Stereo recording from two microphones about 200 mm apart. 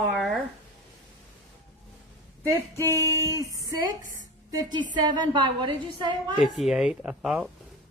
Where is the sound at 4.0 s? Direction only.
40° right (ahead or behind).